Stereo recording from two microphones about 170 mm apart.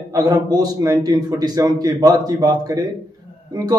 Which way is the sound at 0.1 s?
20° right (ahead or behind).